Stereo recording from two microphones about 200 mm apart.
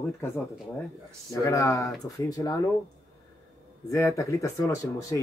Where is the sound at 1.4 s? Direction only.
15° left (ahead or behind).